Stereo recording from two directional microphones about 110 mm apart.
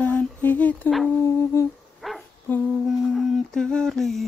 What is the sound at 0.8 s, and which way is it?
Humming, centre (ahead or behind).